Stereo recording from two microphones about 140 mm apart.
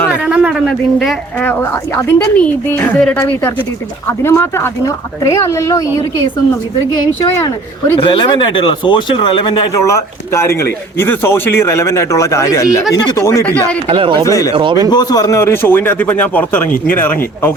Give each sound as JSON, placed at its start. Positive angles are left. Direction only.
{"t": 0.1, "sound": "a sound", "side_deg": -10}
{"t": 2.0, "sound": "a man's voice", "side_deg": 10}
{"t": 7.9, "sound": "speech", "side_deg": 35}
{"t": 9.8, "sound": "a man's voice", "side_deg": 20}
{"t": 13.8, "sound": "speech", "side_deg": -40}
{"t": 14.3, "sound": "a man's voice", "side_deg": 25}
{"t": 14.5, "sound": "speech", "side_deg": -35}
{"t": 14.8, "sound": "speech", "side_deg": 30}